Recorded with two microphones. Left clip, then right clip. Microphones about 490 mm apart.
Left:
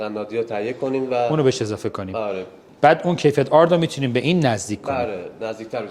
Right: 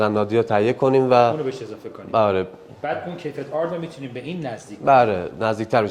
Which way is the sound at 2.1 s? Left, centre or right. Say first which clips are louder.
Right 10 dB; right.